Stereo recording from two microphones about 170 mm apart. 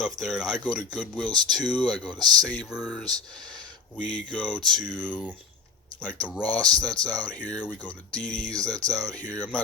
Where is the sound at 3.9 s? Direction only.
50° left (ahead or behind).